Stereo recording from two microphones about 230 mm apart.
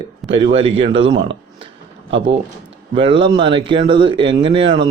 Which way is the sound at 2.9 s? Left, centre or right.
Right.